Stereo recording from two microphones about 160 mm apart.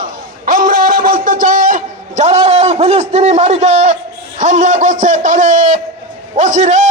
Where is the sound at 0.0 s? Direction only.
60° right (ahead or behind).